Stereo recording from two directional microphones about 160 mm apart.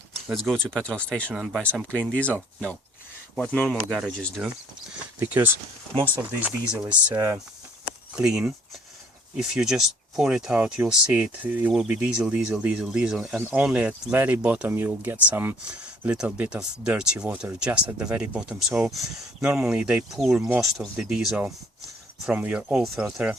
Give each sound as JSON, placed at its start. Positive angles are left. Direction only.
{"t": 0.3, "sound": "speech", "side_deg": 0}
{"t": 1.3, "sound": "speech", "side_deg": -5}
{"t": 1.9, "sound": "speech", "side_deg": 5}
{"t": 3.3, "sound": "speech", "side_deg": 5}
{"t": 4.4, "sound": "speech", "side_deg": -10}
{"t": 7.1, "sound": "speech", "side_deg": -20}
{"t": 8.1, "sound": "speech", "side_deg": -5}